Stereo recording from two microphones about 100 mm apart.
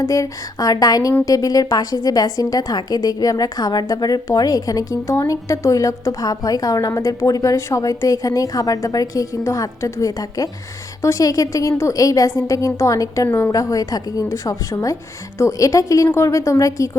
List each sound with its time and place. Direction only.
0.0 s a woman's voice: 35° left (ahead or behind)
13.2 s a woman's voice: 25° left (ahead or behind)
13.5 s a woman's voice: 35° left (ahead or behind)